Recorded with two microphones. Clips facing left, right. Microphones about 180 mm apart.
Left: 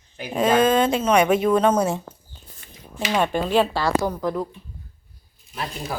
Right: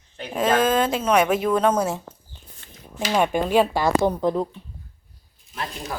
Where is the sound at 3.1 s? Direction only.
10° right (ahead or behind); by 4.4 s 25° right (ahead or behind).